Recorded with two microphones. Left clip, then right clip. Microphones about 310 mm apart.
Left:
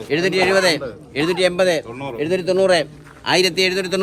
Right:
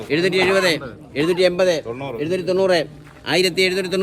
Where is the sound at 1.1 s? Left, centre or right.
Left.